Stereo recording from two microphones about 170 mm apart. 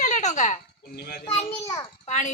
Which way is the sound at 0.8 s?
65° left (ahead or behind).